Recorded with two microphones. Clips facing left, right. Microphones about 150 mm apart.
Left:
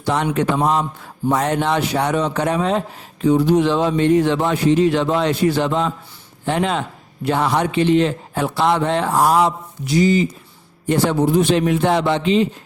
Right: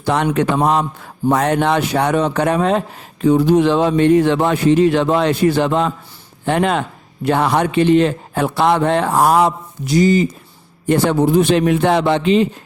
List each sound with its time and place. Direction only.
0.0 s speech: 65° right (ahead or behind); by 10.2 s 45° right (ahead or behind)
10.8 s speech: 55° right (ahead or behind)